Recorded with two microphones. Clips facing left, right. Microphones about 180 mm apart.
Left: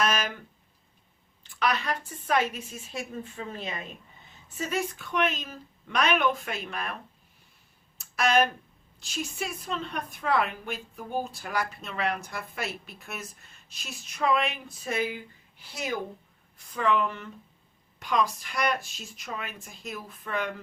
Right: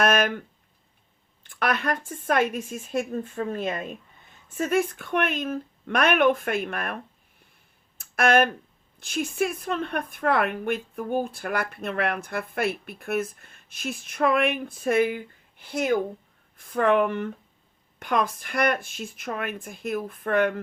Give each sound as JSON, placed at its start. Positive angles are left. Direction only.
{"t": 0.0, "sound": "speech", "side_deg": -55}
{"t": 1.5, "sound": "speech", "side_deg": -55}
{"t": 7.9, "sound": "a sound", "side_deg": -55}
{"t": 9.0, "sound": "a woman's voice", "side_deg": -55}